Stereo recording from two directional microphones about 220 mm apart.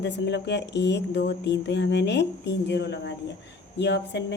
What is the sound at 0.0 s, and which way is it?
A woman's voice, 50° left (ahead or behind).